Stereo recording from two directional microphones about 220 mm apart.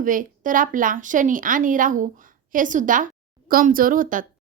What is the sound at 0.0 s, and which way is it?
Speech, 35° right (ahead or behind).